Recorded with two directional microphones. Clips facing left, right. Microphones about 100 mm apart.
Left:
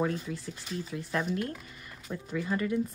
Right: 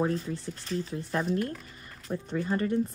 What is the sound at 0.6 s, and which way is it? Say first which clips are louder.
Speech: right 5 dB; 10° left (ahead or behind).